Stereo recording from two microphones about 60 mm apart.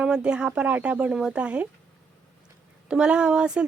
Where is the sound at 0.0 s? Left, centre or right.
Centre.